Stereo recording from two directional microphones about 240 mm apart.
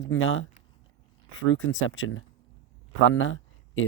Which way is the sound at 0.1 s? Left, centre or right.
Left.